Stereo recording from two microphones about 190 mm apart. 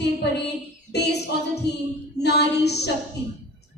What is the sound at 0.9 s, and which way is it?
Speech, 60° left (ahead or behind).